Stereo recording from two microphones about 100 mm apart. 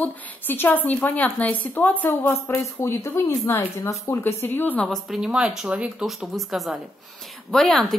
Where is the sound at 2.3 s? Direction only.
30° left (ahead or behind).